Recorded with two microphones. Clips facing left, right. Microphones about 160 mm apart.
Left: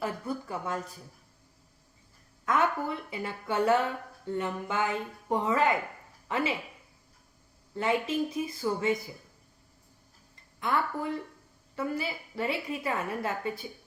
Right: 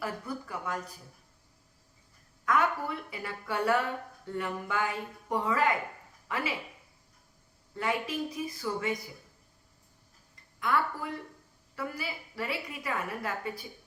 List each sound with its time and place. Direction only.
0.0 s a sound: 25° left (ahead or behind)
2.5 s a woman's voice: 25° left (ahead or behind)
7.8 s a woman's voice: 25° left (ahead or behind)
10.6 s a woman's voice: 25° left (ahead or behind)